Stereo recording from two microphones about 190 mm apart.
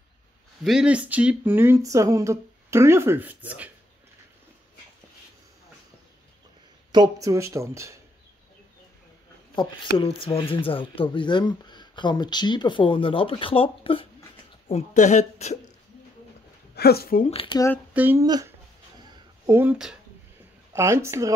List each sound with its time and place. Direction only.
0.7 s speech: 5° right (ahead or behind)
6.9 s speech: 20° right (ahead or behind)
9.6 s speech: 25° left (ahead or behind)
16.7 s a woman's voice: 55° left (ahead or behind)
17.3 s speech: 30° left (ahead or behind)
17.9 s speech: 10° right (ahead or behind)
18.2 s speech: 20° right (ahead or behind)
19.0 s a sound: 15° right (ahead or behind)
20.7 s speech: 15° right (ahead or behind)